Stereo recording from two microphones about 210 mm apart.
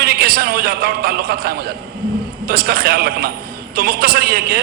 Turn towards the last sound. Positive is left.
turn(degrees=-45)  # may be behind; listen again after turning